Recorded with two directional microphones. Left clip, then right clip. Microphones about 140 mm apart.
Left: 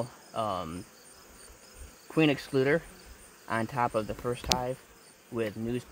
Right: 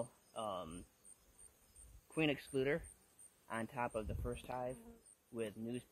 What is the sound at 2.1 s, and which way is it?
Speech, 45° left (ahead or behind).